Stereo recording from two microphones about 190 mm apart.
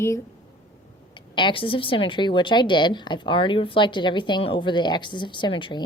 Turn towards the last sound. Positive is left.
turn(degrees=25)  # may be behind; listen again after turning